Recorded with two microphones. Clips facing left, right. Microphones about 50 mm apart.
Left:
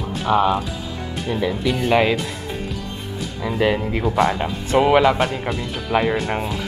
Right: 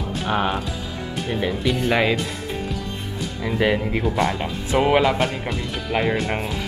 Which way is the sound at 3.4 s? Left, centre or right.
Centre.